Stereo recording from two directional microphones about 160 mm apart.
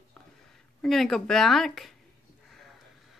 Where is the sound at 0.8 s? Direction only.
Centre (ahead or behind).